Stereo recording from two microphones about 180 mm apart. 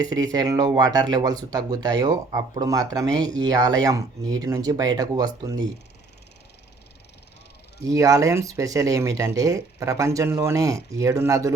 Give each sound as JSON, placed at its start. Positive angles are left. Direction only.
{"t": 0.0, "sound": "speech", "side_deg": -20}
{"t": 7.8, "sound": "speech", "side_deg": -20}